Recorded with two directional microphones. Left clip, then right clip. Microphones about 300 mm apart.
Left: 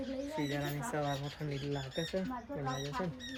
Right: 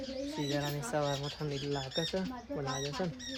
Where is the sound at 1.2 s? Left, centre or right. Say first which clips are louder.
Right 4 dB; right.